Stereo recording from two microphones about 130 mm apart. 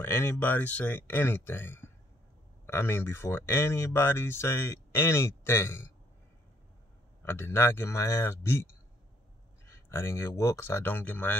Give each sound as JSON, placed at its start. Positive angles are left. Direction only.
{"t": 0.0, "sound": "speech", "side_deg": 15}
{"t": 7.2, "sound": "speech", "side_deg": 20}
{"t": 9.7, "sound": "speech", "side_deg": 20}